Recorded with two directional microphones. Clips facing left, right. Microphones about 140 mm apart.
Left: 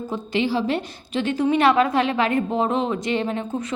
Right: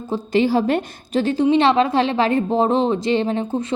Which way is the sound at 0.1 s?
40° right (ahead or behind).